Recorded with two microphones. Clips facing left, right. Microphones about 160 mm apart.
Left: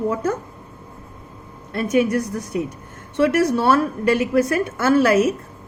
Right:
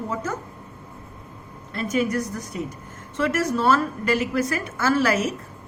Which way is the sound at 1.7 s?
65° left (ahead or behind).